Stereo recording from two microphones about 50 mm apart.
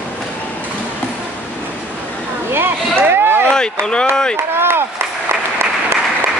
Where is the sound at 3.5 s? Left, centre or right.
Centre.